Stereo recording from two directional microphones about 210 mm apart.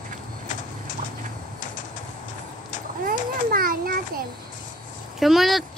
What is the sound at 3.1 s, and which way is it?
Children playing, 45° right (ahead or behind).